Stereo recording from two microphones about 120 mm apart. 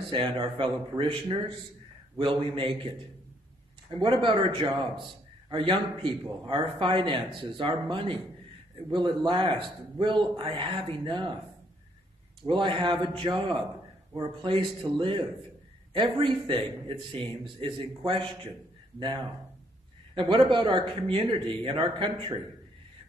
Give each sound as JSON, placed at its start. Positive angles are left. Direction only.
{"t": 0.1, "sound": "a man's voice", "side_deg": -45}
{"t": 4.0, "sound": "a man's voice", "side_deg": -45}
{"t": 12.4, "sound": "a man's voice", "side_deg": -45}
{"t": 20.2, "sound": "a man's voice", "side_deg": -45}